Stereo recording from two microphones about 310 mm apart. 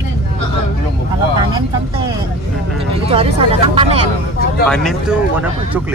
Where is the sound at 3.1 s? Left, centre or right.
Centre.